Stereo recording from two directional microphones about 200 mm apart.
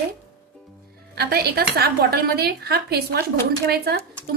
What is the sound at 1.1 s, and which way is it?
Speech, 50° right (ahead or behind).